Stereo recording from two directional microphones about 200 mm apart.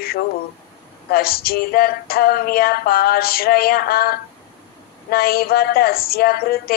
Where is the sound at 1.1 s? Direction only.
50° left (ahead or behind).